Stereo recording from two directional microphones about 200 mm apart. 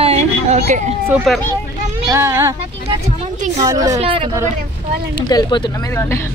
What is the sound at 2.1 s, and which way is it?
Speech, 15° right (ahead or behind).